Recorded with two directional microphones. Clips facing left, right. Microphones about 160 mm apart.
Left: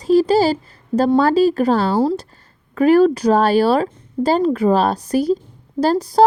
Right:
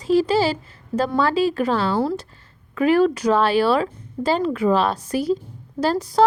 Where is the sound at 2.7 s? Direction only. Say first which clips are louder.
Left 5 dB; 40° left (ahead or behind).